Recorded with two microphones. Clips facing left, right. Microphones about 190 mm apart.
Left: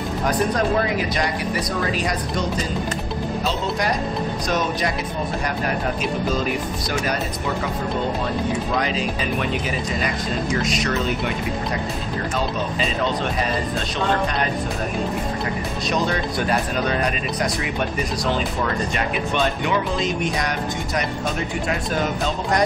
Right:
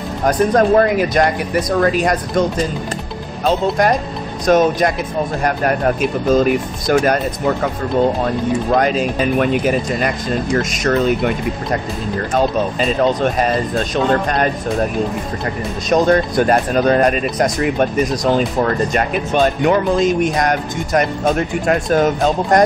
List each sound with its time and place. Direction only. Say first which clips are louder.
0.2 s speech: right 8 dB; 45° right (ahead or behind)
3.4 s speech: right 11 dB; 50° right (ahead or behind)
8.7 s speech: right 8 dB; 50° right (ahead or behind)
15.4 s speech: right 3 dB; 45° right (ahead or behind)